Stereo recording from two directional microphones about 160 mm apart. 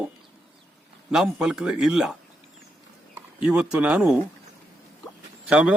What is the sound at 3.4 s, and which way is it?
Speech, 5° right (ahead or behind).